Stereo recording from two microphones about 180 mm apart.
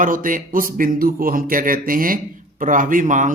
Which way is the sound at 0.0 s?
50° right (ahead or behind).